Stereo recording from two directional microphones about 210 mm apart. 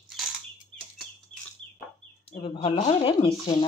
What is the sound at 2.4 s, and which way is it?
Speech, 25° left (ahead or behind).